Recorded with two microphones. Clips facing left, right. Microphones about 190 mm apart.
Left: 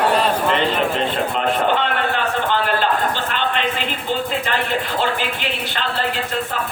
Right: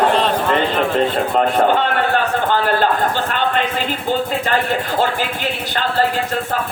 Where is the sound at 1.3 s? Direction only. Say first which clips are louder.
Right 5 dB; 45° right (ahead or behind).